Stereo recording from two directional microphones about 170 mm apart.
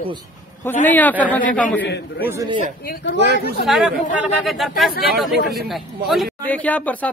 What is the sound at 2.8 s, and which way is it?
Speech, 75° left (ahead or behind).